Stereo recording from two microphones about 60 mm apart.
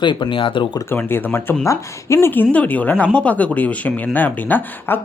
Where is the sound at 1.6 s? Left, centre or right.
Left.